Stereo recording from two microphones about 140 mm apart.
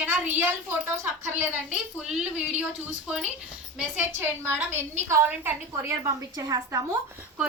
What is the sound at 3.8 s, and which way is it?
A woman's voice, 15° right (ahead or behind).